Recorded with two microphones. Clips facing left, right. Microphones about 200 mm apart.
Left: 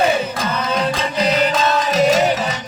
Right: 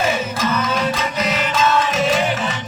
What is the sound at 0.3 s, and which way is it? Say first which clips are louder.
Music: even; 35° left (ahead or behind).